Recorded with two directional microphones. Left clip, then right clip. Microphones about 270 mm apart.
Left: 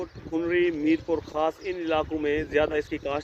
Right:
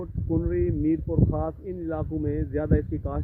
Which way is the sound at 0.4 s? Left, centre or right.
Centre.